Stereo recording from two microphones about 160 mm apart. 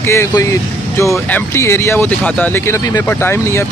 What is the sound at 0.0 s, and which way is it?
Speech, 15° left (ahead or behind).